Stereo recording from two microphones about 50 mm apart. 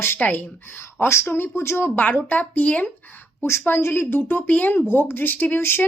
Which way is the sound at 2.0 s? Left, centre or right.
Left.